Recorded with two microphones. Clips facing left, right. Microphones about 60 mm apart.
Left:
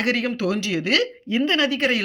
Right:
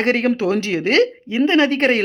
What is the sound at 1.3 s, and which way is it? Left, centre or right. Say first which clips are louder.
Speech: right 5 dB; right.